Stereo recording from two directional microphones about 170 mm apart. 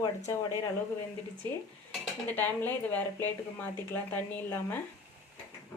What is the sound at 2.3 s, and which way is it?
A woman's voice, 10° left (ahead or behind).